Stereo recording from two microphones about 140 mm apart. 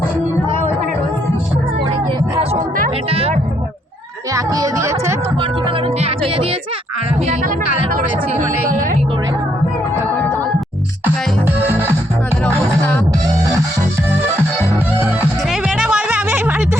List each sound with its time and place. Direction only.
3.1 s music: 45° right (ahead or behind)
4.4 s music: 25° right (ahead or behind)
6.0 s music: 45° right (ahead or behind)
7.9 s music: 65° right (ahead or behind)
15.0 s music: 10° right (ahead or behind)